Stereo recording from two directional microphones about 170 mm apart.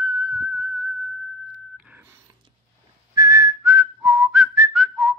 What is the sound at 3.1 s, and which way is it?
Whistling, 20° right (ahead or behind).